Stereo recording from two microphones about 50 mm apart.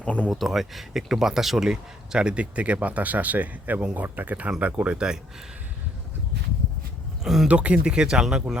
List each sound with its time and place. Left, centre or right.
0.0 s speech: left
0.3 s speech: centre
7.4 s speech: right